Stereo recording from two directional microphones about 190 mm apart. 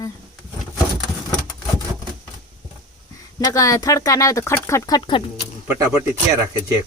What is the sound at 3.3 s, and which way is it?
Speech, 20° left (ahead or behind).